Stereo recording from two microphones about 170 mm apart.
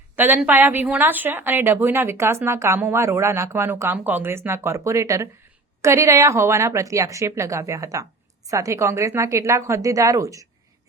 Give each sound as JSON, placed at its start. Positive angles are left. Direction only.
{"t": 0.3, "sound": "a woman's voice", "side_deg": -10}